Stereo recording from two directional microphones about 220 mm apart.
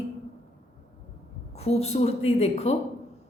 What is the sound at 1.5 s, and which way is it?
A woman's voice, 30° left (ahead or behind).